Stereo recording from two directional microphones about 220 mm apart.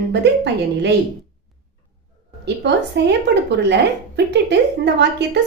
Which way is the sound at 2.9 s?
50° right (ahead or behind).